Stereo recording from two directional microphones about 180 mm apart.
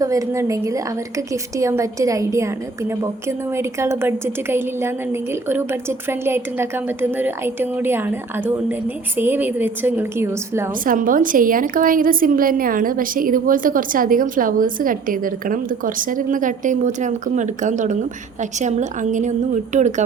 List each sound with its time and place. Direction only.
0.0 s a woman's voice: 20° right (ahead or behind)
10.8 s a woman's voice: 50° right (ahead or behind)